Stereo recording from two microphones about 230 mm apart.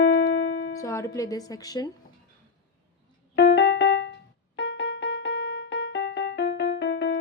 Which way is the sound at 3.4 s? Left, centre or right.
Left.